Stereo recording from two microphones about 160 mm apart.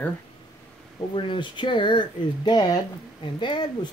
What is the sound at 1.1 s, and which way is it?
Speech, 30° left (ahead or behind).